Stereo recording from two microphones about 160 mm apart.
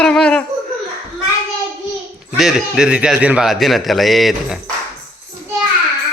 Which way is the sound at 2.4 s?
Centre (ahead or behind).